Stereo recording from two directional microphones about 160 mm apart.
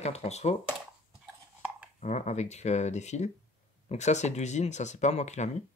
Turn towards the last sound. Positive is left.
turn(degrees=45)  # may be behind; listen again after turning